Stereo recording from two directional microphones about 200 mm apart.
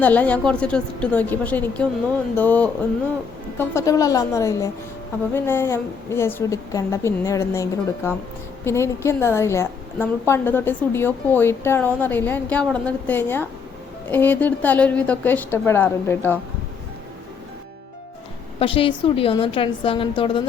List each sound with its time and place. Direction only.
0.0 s a woman's voice: 10° left (ahead or behind)
18.6 s a woman's voice: 25° left (ahead or behind)